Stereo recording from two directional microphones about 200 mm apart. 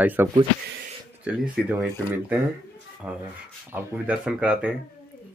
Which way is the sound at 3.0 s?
5° right (ahead or behind).